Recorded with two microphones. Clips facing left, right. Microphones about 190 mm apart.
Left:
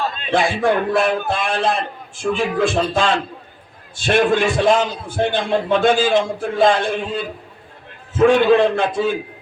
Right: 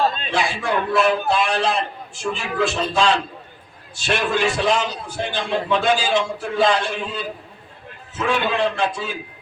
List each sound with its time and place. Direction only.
0.3 s a man's voice: 55° left (ahead or behind)
8.2 s a man's voice: 50° left (ahead or behind)